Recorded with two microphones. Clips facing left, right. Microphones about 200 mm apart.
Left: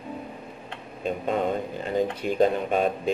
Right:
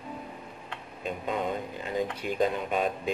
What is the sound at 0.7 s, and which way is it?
Speech, 40° left (ahead or behind).